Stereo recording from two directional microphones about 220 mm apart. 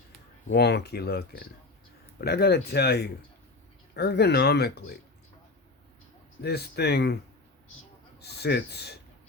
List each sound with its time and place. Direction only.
0.4 s speech: 50° left (ahead or behind)
6.4 s speech: 45° left (ahead or behind)
8.2 s speech: 50° left (ahead or behind)